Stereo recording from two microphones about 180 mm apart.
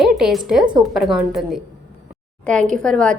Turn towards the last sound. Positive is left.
turn(degrees=5)  # may be behind; listen again after turning